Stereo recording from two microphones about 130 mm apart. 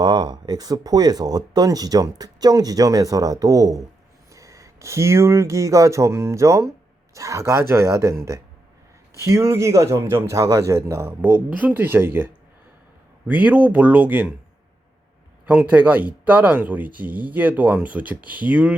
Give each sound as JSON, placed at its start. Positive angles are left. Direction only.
{"t": 0.0, "sound": "speech", "side_deg": -35}
{"t": 15.4, "sound": "speech", "side_deg": -15}